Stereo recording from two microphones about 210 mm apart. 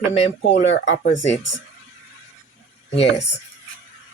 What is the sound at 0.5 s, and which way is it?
Speech, 60° left (ahead or behind).